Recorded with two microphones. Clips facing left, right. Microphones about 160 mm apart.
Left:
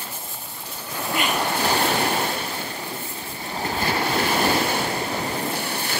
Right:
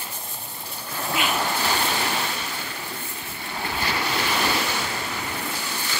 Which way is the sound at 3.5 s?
40° left (ahead or behind).